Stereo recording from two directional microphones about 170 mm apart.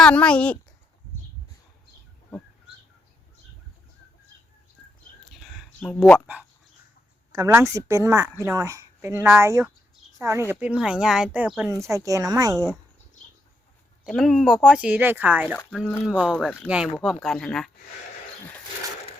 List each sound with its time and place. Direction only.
0.0 s speech: 5° left (ahead or behind)
5.3 s a sound: centre (ahead or behind)
7.3 s a woman's voice: 20° right (ahead or behind); by 11.7 s 5° right (ahead or behind)
11.7 s a woman's voice: 20° right (ahead or behind)
14.0 s a woman's voice: centre (ahead or behind)
15.5 s speech: centre (ahead or behind)